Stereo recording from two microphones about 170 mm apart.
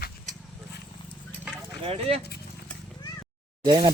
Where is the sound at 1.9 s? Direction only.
35° right (ahead or behind).